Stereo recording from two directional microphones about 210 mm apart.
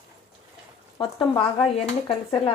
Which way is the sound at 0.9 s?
25° left (ahead or behind).